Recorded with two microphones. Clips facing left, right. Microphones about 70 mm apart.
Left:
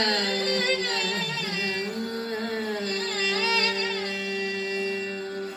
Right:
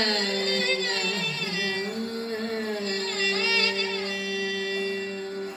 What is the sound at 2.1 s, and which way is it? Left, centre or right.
Music, left.